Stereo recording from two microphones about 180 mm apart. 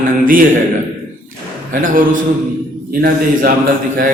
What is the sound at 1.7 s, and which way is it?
Speech, 50° right (ahead or behind).